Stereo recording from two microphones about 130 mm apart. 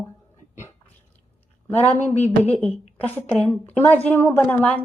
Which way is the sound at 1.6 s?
15° left (ahead or behind).